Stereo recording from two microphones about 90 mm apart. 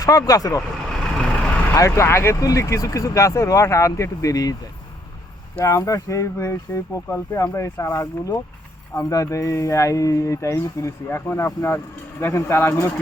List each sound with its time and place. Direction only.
0.0 s speech: 40° left (ahead or behind)
0.9 s vehicle: 5° left (ahead or behind)
1.7 s speech: 35° left (ahead or behind)
5.5 s speech: 35° left (ahead or behind)